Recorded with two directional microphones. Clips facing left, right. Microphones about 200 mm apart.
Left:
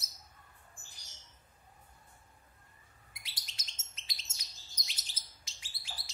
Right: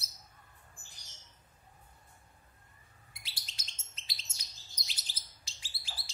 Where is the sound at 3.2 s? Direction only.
30° right (ahead or behind).